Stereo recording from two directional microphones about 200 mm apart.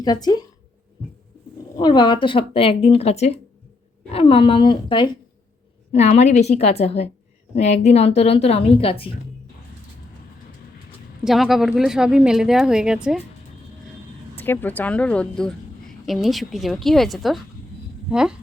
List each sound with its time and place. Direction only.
0.0 s speech: 20° left (ahead or behind)
1.7 s speech: 20° left (ahead or behind)
5.9 s a woman's voice: 35° left (ahead or behind)
11.2 s speech: centre (ahead or behind)
14.3 s speech: 10° left (ahead or behind)